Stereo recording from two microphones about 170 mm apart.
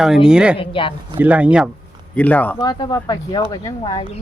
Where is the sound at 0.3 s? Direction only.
5° right (ahead or behind).